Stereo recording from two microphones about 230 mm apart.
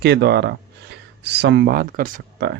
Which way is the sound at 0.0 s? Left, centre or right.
Right.